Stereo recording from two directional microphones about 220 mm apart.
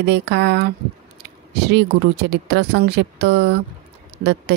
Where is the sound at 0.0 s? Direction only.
50° right (ahead or behind).